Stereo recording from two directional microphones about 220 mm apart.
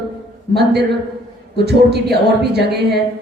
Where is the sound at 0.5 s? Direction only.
50° right (ahead or behind).